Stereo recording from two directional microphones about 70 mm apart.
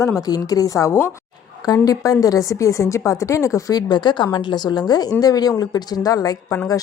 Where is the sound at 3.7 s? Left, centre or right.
Left.